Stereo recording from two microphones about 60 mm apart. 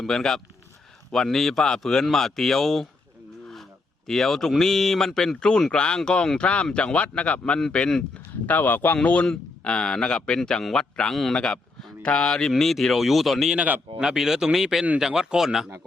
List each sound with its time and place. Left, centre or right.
0.0 s speech: centre
4.0 s a man's voice: centre
8.4 s speech: left
9.2 s a man's voice: centre
11.1 s speech: centre